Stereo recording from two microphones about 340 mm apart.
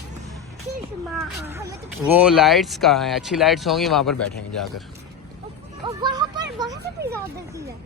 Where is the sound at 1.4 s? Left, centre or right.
Centre.